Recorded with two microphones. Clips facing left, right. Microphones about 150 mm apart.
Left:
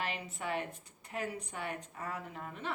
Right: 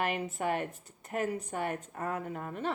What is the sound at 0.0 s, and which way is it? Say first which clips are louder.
A woman's voice: right 7 dB; 50° right (ahead or behind).